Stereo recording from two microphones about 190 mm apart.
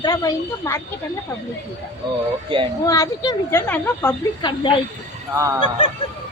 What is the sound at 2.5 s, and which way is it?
Speech, 25° right (ahead or behind).